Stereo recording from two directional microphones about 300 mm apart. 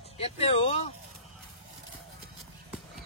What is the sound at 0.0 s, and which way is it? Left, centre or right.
Speech, centre.